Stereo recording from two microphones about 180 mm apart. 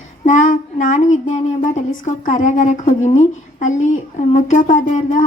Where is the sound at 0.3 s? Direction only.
45° left (ahead or behind).